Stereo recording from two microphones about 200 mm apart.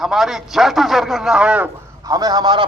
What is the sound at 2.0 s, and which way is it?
Speech, 20° right (ahead or behind).